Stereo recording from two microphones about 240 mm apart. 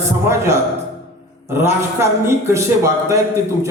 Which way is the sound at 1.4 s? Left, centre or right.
Centre.